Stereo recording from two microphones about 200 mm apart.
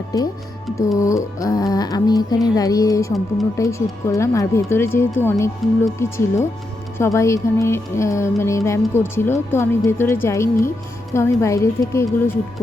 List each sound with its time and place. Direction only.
0.9 s music: 15° left (ahead or behind)